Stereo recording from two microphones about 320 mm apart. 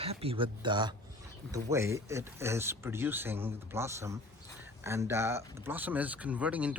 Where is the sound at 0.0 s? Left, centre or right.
Centre.